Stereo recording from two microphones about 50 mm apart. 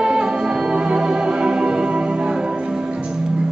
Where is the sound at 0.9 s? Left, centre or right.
Centre.